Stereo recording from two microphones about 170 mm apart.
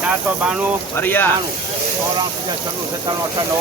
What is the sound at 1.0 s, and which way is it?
Speech, 10° left (ahead or behind).